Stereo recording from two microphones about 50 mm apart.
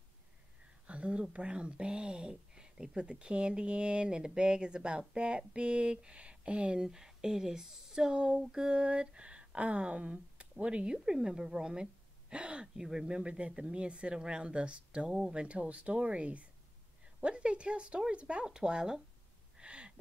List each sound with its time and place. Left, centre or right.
0.8 s a sound: right
1.3 s speech: right
19.6 s gasp: right